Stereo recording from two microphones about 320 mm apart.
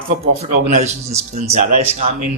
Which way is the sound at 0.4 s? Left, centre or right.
Right.